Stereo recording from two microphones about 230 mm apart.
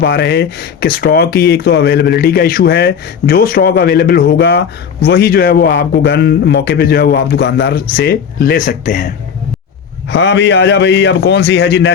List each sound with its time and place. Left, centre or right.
0.0 s speech: left
10.1 s speech: left